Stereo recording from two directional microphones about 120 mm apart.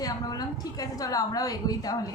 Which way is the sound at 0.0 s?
30° left (ahead or behind).